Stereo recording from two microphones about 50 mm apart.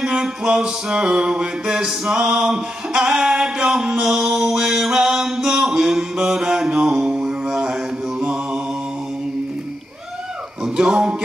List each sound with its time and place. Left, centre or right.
0.0 s music: centre
7.1 s mantra: centre
10.6 s music: centre